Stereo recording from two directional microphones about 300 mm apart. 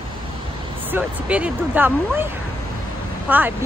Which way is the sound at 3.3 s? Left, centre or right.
Centre.